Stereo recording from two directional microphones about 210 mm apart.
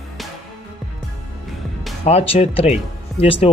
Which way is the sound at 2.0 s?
30° left (ahead or behind).